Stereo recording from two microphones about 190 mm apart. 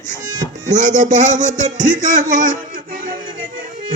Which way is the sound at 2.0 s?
40° right (ahead or behind).